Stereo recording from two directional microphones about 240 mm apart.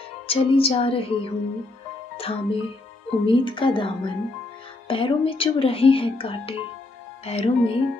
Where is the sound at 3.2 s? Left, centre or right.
Left.